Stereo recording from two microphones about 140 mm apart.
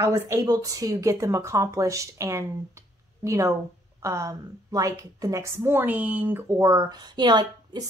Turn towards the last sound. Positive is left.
turn(degrees=-30)  # may be behind; listen again after turning